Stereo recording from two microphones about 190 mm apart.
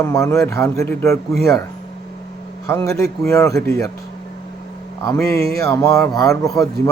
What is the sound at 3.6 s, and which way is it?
Speech, 50° right (ahead or behind).